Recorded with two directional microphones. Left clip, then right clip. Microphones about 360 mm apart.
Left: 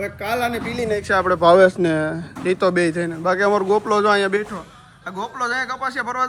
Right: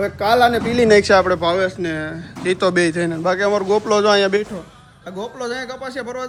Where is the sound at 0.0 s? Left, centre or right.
Centre.